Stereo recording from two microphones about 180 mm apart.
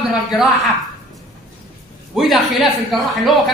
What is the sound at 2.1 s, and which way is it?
A man's voice, centre (ahead or behind).